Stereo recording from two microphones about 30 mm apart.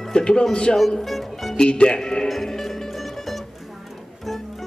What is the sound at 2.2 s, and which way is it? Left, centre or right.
Music, centre.